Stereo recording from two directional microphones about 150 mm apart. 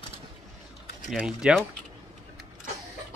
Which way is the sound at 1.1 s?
5° right (ahead or behind).